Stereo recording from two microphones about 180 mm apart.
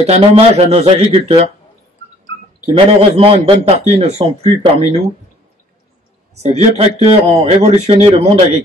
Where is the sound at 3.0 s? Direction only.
30° right (ahead or behind).